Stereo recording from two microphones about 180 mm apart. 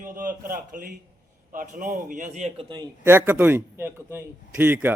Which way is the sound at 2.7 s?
15° right (ahead or behind).